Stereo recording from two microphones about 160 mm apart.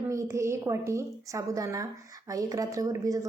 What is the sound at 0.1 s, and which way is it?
A woman's voice, 20° right (ahead or behind).